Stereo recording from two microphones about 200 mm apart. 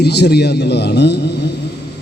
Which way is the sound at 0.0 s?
55° left (ahead or behind).